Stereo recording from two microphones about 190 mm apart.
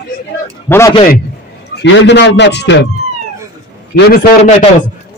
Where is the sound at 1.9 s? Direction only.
70° left (ahead or behind).